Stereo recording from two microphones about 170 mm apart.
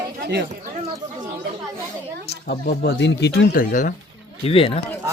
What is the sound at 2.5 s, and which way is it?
Speech, 65° left (ahead or behind).